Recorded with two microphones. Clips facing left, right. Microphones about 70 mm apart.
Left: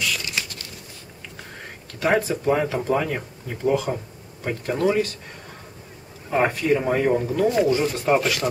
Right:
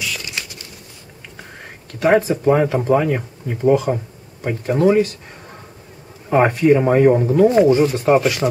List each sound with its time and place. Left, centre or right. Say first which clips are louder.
0.0 s a sound: even; centre
2.0 s speech: right 6 dB; centre
6.3 s speech: right 7 dB; right
7.8 s speech: right 6 dB; centre